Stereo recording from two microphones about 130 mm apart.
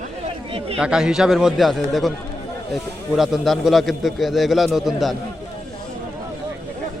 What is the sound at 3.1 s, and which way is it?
A man's voice, centre (ahead or behind).